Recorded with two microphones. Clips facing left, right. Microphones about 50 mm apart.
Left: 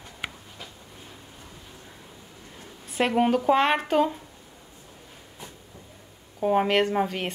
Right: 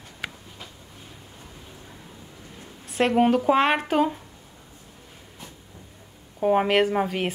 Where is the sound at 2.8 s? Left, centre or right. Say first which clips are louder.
Right 3 dB; centre.